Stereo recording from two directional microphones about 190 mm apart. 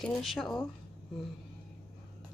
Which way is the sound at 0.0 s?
Centre (ahead or behind).